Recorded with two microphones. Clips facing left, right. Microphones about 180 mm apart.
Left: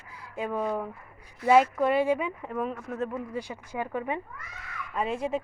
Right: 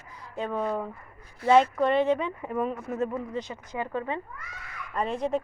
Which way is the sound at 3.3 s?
10° left (ahead or behind).